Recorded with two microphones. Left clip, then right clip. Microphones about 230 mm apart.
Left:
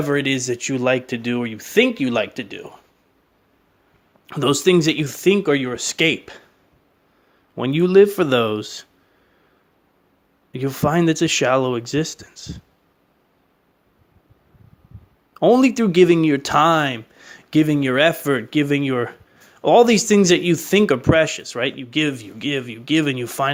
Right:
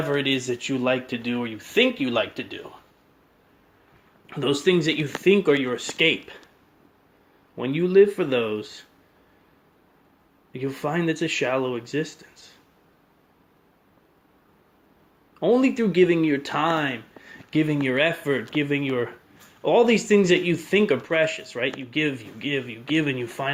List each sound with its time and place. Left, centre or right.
0.0 s speech: left
4.3 s speech: left
7.5 s speech: left
10.5 s speech: left
15.4 s speech: left